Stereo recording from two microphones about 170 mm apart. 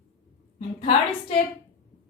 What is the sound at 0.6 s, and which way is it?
Speech, 35° left (ahead or behind).